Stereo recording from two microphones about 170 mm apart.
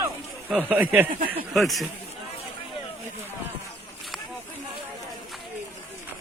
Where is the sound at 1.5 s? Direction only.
Centre (ahead or behind).